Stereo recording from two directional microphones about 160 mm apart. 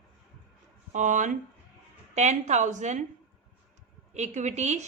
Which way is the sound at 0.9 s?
50° right (ahead or behind).